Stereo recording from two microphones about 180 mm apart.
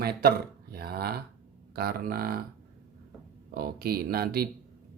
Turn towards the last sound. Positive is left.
turn(degrees=-60)  # may be behind; listen again after turning